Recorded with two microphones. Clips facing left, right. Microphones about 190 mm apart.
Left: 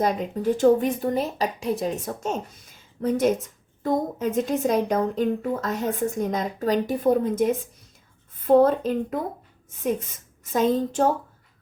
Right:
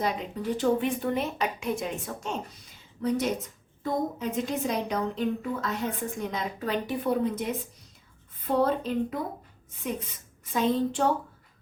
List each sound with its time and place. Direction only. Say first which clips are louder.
0.0 s a woman's voice: left 6 dB; 45° left (ahead or behind)
10.4 s a woman's voice: left 4 dB; 45° left (ahead or behind)